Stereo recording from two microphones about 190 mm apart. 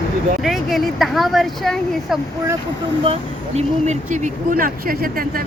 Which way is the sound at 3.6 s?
35° right (ahead or behind).